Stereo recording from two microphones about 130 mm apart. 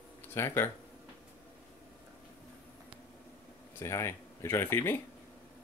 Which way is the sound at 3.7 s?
20° left (ahead or behind).